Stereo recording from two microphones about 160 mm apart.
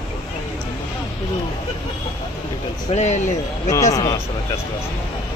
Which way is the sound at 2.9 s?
45° left (ahead or behind).